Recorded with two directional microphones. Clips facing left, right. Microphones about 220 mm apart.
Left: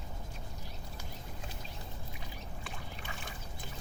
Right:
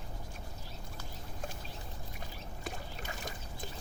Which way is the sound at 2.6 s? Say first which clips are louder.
Right 6 dB; 40° right (ahead or behind).